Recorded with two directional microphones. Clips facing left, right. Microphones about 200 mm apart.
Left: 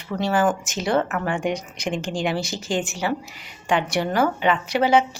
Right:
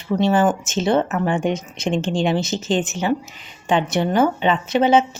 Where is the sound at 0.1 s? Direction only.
20° right (ahead or behind).